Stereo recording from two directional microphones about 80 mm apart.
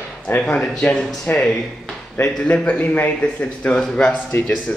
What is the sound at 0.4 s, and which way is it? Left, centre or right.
Speech, centre.